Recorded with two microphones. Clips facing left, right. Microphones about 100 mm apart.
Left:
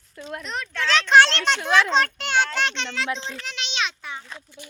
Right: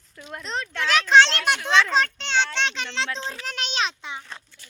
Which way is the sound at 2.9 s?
30° right (ahead or behind).